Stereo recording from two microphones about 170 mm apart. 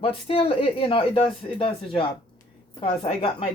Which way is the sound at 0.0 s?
35° left (ahead or behind).